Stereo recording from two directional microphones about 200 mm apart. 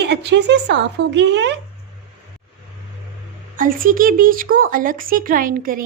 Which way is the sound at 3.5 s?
45° right (ahead or behind).